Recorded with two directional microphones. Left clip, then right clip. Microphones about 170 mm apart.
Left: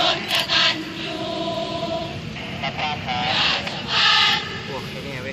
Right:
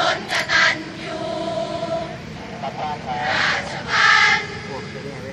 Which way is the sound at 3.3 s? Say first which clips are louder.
Right 1 dB; 5° right (ahead or behind).